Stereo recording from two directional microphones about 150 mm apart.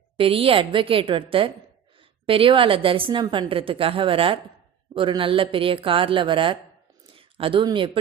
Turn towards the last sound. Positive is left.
turn(degrees=-35)  # may be behind; listen again after turning